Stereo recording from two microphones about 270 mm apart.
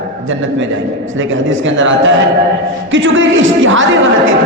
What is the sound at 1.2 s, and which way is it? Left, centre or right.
A man's voice, right.